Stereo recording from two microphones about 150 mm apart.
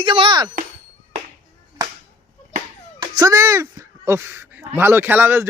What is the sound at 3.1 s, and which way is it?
Speech, 20° right (ahead or behind).